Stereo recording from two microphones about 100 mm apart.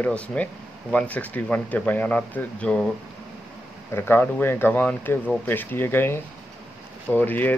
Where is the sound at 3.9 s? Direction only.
20° left (ahead or behind).